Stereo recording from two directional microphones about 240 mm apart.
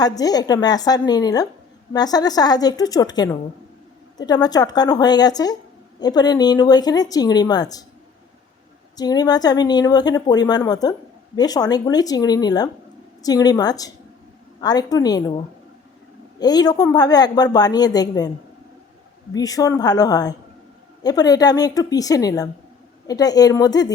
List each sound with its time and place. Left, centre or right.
0.0 s speech: centre
4.3 s speech: centre
9.0 s speech: centre
16.4 s speech: centre
19.3 s speech: centre